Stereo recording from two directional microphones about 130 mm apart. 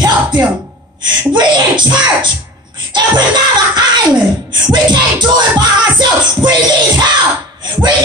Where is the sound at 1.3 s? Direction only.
35° right (ahead or behind).